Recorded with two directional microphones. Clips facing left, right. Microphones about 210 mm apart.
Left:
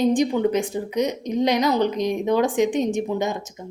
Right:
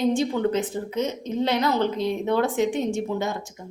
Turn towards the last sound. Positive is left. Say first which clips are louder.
# left 3 dB
turn(degrees=20)  # may be behind; listen again after turning